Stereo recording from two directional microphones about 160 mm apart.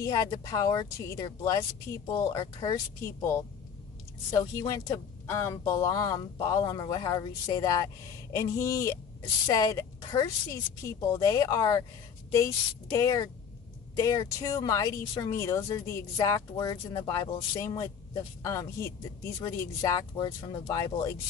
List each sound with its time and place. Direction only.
0.0 s speech: 20° left (ahead or behind)